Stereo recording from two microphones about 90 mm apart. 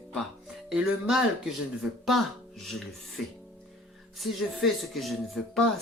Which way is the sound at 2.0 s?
Centre (ahead or behind).